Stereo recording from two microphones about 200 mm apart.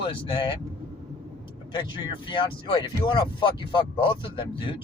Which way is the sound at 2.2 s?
25° left (ahead or behind).